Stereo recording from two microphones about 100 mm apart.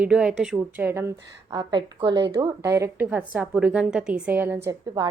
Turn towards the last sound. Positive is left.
turn(degrees=-40)  # may be behind; listen again after turning